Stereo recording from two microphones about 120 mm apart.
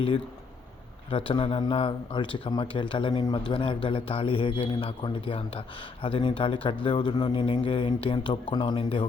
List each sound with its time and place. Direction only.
1.1 s a man's voice: 50° left (ahead or behind)